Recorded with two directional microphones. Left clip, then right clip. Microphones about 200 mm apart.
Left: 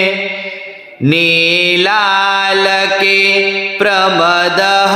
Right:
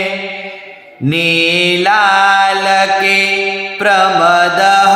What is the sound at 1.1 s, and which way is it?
Mantra, 45° left (ahead or behind).